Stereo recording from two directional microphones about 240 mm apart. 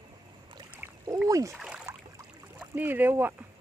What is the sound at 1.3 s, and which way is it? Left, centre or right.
Speech, centre.